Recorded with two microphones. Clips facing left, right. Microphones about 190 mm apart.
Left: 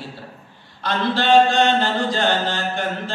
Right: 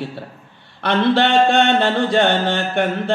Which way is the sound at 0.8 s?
65° right (ahead or behind).